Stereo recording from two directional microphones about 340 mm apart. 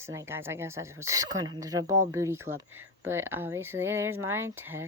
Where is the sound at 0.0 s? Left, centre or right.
Centre.